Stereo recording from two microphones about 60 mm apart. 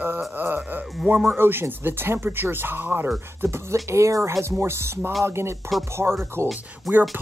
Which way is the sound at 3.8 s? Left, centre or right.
Right.